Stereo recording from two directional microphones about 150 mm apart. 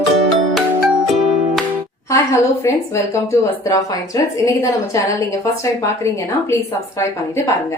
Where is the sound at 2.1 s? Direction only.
20° left (ahead or behind).